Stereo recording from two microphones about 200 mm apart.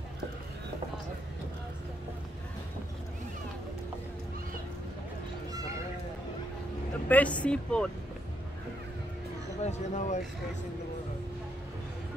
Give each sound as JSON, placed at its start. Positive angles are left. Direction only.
{"t": 7.1, "sound": "speech", "side_deg": 5}
{"t": 9.6, "sound": "speech", "side_deg": 35}